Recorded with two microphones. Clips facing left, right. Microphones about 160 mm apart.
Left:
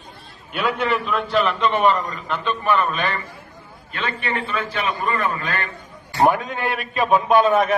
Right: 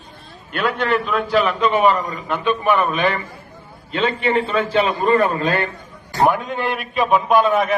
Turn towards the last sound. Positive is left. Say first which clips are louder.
# even
turn(degrees=0)  # may be behind; listen again after turning